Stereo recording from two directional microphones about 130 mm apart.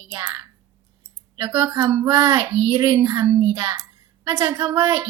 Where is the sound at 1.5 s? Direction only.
25° right (ahead or behind).